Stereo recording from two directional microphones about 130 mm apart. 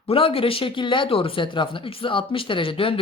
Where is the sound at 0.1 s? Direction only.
45° left (ahead or behind).